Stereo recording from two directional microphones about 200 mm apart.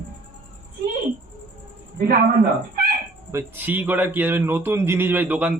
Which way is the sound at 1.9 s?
45° right (ahead or behind).